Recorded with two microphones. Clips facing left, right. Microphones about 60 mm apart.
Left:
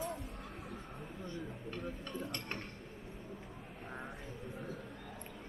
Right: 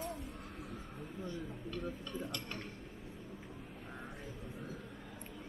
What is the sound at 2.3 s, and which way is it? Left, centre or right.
Speech, left.